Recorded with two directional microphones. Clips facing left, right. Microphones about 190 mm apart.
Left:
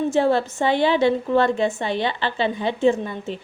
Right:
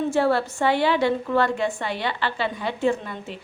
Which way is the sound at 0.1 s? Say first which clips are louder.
Left 2 dB; 20° left (ahead or behind).